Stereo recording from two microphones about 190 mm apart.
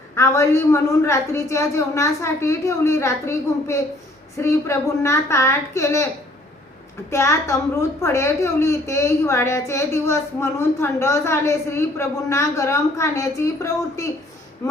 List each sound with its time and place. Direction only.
0.2 s a woman's voice: 15° left (ahead or behind)
7.1 s a woman's voice: 15° left (ahead or behind)